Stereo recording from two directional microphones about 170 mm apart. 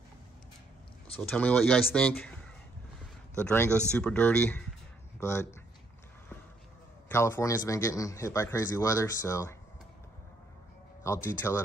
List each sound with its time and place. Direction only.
1.3 s a man's voice: 5° left (ahead or behind)
7.1 s a man's voice: 15° left (ahead or behind)
11.2 s a man's voice: 15° left (ahead or behind)